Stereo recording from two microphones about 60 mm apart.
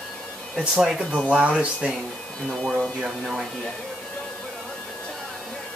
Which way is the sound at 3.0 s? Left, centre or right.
Centre.